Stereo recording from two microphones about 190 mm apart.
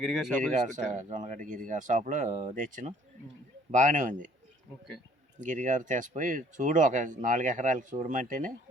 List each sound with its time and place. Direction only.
0.0 s speech: centre (ahead or behind)
0.5 s speech: 40° right (ahead or behind)
5.4 s speech: 40° right (ahead or behind)